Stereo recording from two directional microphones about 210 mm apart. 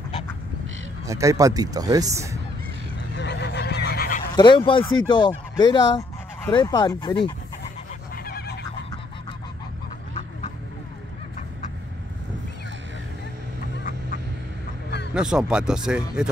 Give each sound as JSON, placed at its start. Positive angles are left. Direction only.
{"t": 1.0, "sound": "speech", "side_deg": -15}
{"t": 3.2, "sound": "honk", "side_deg": 55}
{"t": 4.4, "sound": "speech", "side_deg": 25}
{"t": 8.1, "sound": "goose", "side_deg": 45}
{"t": 15.1, "sound": "speech", "side_deg": -5}